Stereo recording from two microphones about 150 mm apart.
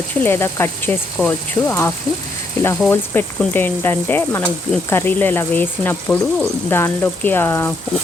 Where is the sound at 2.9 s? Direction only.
15° left (ahead or behind).